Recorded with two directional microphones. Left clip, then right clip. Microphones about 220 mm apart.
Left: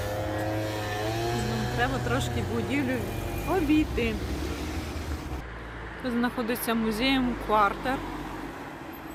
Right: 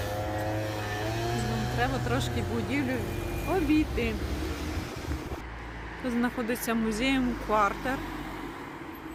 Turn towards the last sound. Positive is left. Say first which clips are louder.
# left 2 dB
turn(degrees=-5)  # may be behind; listen again after turning